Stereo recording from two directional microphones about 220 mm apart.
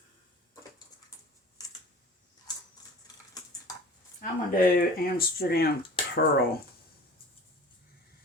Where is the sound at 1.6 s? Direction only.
15° left (ahead or behind).